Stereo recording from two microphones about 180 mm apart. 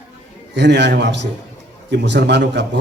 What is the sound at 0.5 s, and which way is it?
A man's voice, 75° right (ahead or behind).